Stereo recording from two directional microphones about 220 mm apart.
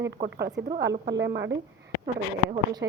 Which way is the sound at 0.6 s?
50° right (ahead or behind).